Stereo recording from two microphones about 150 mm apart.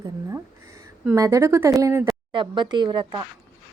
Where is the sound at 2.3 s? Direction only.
30° right (ahead or behind).